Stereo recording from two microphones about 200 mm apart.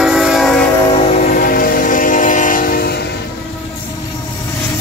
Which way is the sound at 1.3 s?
45° left (ahead or behind).